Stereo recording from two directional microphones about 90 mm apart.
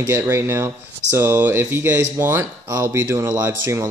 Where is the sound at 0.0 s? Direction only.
25° right (ahead or behind).